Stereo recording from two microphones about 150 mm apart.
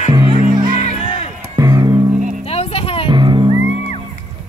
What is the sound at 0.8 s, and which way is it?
Music, 45° left (ahead or behind).